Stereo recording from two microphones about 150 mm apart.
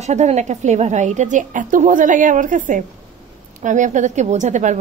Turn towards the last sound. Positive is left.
turn(degrees=-55)  # may be behind; listen again after turning